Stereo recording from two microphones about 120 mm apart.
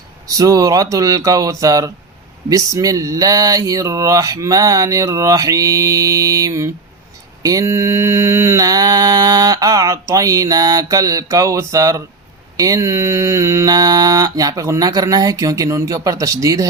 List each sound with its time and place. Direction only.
0.3 s mantra: 30° right (ahead or behind)